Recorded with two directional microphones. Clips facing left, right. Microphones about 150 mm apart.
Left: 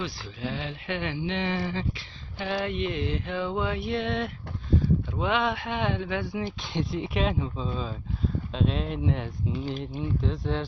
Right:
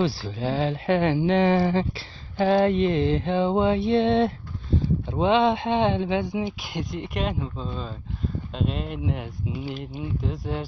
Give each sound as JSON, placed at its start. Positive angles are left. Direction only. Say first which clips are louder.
{"t": 0.0, "sound": "speech", "louder": "right 8 dB", "side_deg": -35}
{"t": 2.3, "sound": "mantra", "louder": "right 10 dB", "side_deg": -35}
{"t": 6.6, "sound": "speech", "louder": "left 1 dB", "side_deg": 0}